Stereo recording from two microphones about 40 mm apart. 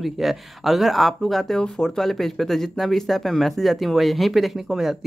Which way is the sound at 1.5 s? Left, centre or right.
Centre.